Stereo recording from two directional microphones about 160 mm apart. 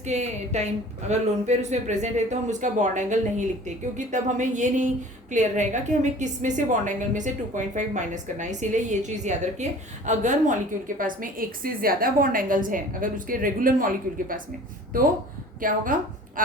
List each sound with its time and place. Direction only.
0.0 s a woman's voice: 45° right (ahead or behind)
15.6 s a woman's voice: 60° right (ahead or behind)